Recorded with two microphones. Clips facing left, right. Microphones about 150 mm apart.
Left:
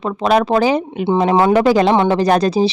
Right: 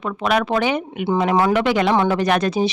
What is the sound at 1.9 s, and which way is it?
Speech, 20° left (ahead or behind).